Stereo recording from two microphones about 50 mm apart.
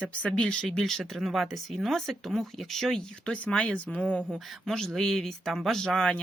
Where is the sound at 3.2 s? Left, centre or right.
Left.